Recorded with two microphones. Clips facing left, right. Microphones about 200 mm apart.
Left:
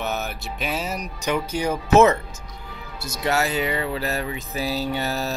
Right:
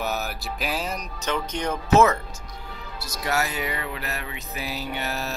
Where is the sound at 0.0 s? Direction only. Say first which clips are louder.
Left 1 dB; centre (ahead or behind).